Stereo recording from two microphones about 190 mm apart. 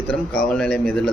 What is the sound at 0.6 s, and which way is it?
Speech, 5° left (ahead or behind).